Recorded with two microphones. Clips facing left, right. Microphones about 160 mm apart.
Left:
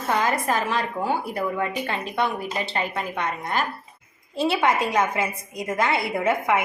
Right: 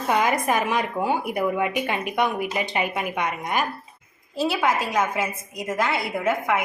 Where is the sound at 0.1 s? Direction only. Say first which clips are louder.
Right 2 dB; 15° right (ahead or behind).